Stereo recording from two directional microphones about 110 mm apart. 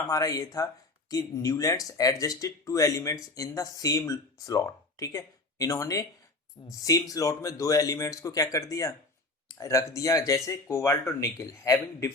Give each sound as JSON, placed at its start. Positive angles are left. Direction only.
{"t": 0.1, "sound": "speech", "side_deg": 30}